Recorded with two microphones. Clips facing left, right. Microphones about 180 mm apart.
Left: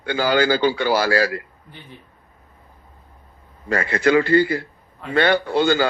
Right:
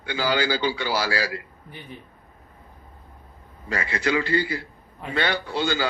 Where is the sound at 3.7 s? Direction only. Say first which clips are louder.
Left 7 dB; 50° left (ahead or behind).